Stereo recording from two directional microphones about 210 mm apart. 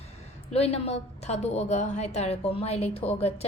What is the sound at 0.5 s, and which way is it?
A woman's voice, 30° left (ahead or behind).